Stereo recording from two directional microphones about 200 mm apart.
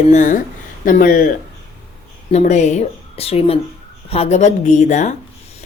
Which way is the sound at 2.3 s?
35° left (ahead or behind).